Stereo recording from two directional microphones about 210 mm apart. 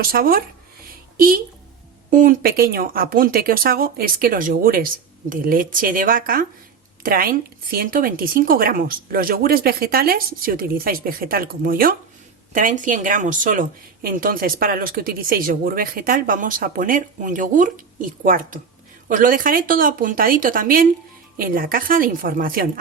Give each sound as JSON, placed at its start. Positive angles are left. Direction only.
{"t": 0.0, "sound": "speech", "side_deg": -45}